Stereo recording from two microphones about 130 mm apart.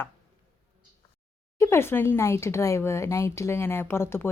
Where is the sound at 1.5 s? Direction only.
20° left (ahead or behind).